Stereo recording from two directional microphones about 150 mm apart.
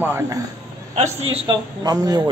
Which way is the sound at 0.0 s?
15° right (ahead or behind).